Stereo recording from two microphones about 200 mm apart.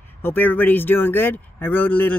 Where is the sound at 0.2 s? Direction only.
10° left (ahead or behind).